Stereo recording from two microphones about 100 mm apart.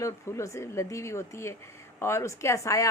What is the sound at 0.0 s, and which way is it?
A woman's voice, 30° left (ahead or behind).